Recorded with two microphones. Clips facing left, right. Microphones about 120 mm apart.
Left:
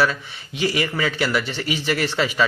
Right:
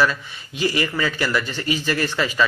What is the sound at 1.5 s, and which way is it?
Speech, 70° left (ahead or behind).